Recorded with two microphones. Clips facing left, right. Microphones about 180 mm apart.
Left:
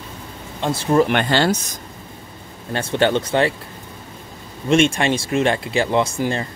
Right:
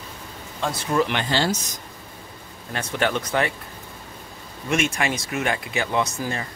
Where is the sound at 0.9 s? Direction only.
55° left (ahead or behind).